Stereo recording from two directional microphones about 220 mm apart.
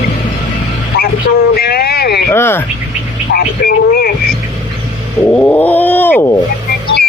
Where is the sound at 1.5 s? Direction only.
45° left (ahead or behind).